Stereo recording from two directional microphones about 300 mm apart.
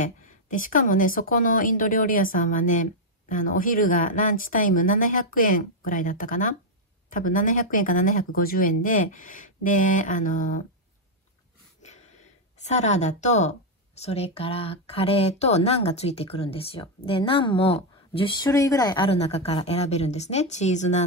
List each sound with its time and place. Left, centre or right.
0.0 s a woman's voice: left
12.6 s a woman's voice: left